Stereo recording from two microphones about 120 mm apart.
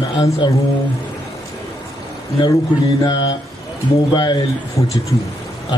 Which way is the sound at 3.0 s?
40° left (ahead or behind).